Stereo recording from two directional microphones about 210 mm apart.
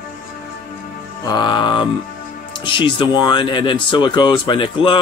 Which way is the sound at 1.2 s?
20° left (ahead or behind).